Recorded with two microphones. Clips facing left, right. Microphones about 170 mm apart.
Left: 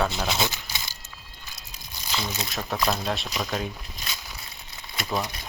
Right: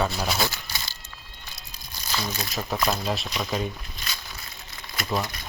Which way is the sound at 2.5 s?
Centre (ahead or behind).